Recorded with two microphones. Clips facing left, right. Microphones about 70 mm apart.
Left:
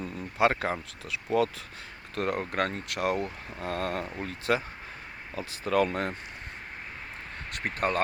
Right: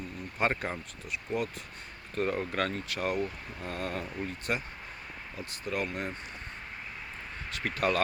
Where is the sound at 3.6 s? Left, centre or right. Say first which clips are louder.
Left 4 dB; left.